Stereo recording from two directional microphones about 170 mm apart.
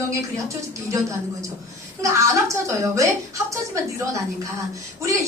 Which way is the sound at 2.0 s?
20° right (ahead or behind).